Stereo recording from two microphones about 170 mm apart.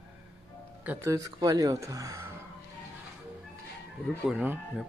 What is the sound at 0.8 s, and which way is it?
Speech, 15° right (ahead or behind).